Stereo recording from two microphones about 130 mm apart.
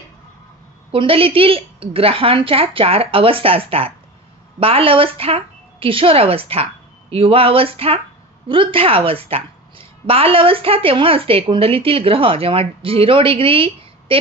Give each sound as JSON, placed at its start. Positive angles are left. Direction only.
{"t": 0.9, "sound": "a woman's voice", "side_deg": -45}